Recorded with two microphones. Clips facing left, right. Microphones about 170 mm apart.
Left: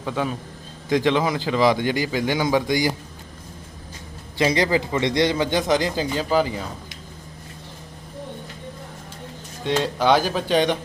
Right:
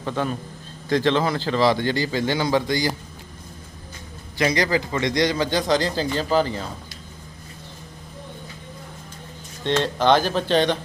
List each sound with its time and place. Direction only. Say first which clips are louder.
0.0 s a man's voice: even; 5° left (ahead or behind)
4.4 s a man's voice: left 1 dB; 25° left (ahead or behind); by 6.7 s 10° left (ahead or behind)
9.6 s a man's voice: right 1 dB; 10° left (ahead or behind)